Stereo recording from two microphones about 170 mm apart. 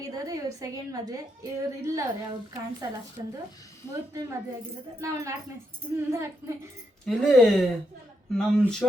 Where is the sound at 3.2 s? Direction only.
20° right (ahead or behind).